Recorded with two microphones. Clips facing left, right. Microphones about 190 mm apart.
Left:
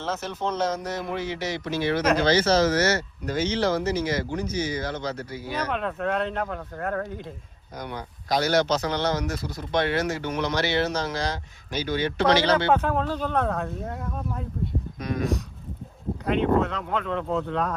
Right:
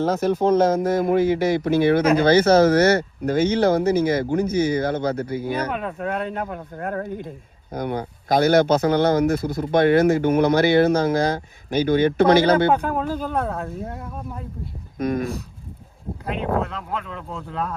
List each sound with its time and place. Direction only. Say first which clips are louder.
0.0 s speech: right 10 dB; 45° right (ahead or behind)
5.7 s speech: even; 5° right (ahead or behind)
7.7 s speech: right 9 dB; 55° right (ahead or behind)
12.7 s speech: right 1 dB; 10° right (ahead or behind)
14.9 s speech: right 7 dB; 50° right (ahead or behind)
16.2 s speech: left 2 dB; centre (ahead or behind)